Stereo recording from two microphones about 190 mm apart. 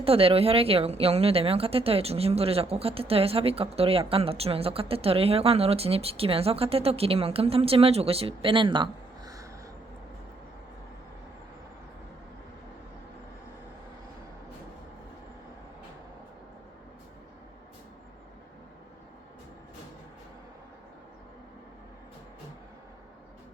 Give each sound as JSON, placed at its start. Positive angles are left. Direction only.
{"t": 0.0, "sound": "a woman's voice", "side_deg": -30}